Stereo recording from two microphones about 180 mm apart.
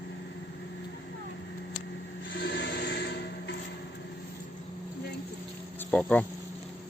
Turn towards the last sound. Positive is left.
turn(degrees=10)  # may be behind; listen again after turning